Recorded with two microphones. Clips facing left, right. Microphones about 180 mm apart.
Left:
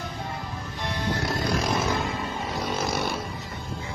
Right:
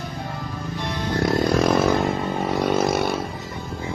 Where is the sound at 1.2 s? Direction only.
55° right (ahead or behind).